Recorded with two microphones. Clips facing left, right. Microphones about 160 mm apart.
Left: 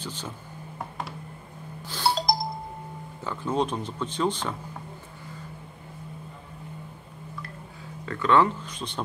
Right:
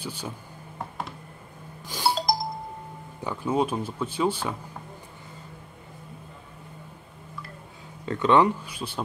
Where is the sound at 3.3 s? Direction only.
10° right (ahead or behind).